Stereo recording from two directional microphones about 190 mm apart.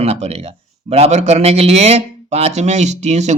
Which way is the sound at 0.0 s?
35° right (ahead or behind).